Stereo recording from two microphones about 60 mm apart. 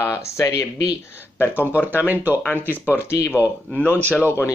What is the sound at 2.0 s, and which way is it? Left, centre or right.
Speech, right.